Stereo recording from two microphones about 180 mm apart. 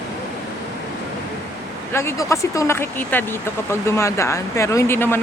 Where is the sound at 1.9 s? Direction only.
15° left (ahead or behind).